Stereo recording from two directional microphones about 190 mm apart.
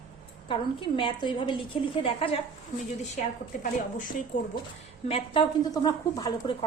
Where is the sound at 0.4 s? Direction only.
25° left (ahead or behind).